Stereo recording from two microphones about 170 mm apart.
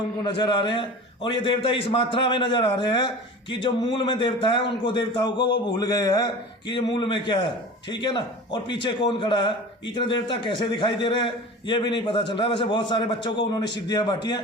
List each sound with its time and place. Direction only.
0.2 s a man's voice: 25° left (ahead or behind)